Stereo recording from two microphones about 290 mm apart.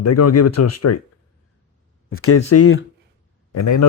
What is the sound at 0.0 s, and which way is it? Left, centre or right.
Speech, left.